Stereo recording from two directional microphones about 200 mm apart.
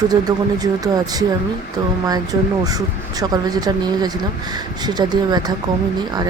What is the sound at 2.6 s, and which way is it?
Speech, 20° right (ahead or behind).